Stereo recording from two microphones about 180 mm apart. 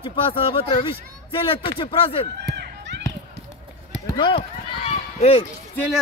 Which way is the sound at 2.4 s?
60° right (ahead or behind).